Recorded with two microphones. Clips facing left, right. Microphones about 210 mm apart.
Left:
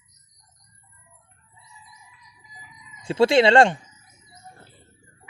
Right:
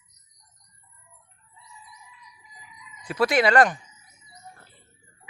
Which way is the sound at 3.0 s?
25° left (ahead or behind).